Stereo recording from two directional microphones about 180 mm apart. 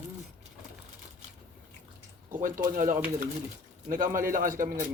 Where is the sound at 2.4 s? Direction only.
45° right (ahead or behind).